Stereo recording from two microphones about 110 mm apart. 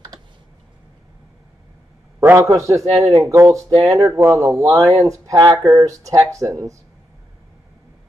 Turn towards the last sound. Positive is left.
turn(degrees=-30)  # may be behind; listen again after turning